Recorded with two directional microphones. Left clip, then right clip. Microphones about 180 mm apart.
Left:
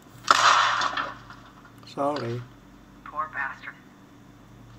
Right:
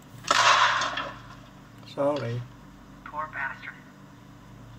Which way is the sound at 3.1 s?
40° left (ahead or behind).